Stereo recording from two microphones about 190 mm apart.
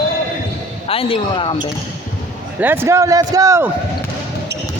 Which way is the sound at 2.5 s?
10° right (ahead or behind).